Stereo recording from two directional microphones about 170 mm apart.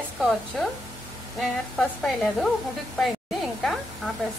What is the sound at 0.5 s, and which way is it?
Speech, 5° left (ahead or behind).